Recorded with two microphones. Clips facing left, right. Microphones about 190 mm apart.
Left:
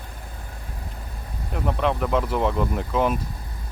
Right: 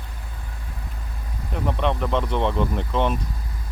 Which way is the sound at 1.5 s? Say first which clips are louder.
Even; centre (ahead or behind).